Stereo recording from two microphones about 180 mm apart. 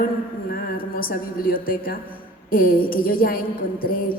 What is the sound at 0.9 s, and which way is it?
A woman's voice, 55° left (ahead or behind).